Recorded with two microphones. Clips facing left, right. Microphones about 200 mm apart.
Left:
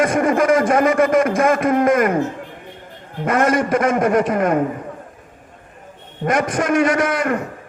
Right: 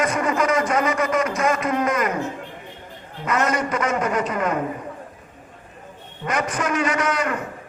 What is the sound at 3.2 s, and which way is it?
A man's voice, 50° left (ahead or behind).